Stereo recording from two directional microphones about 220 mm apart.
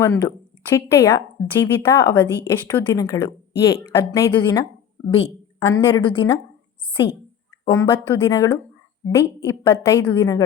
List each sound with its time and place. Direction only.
0.0 s a woman's voice: 15° left (ahead or behind)
7.6 s speech: 10° left (ahead or behind)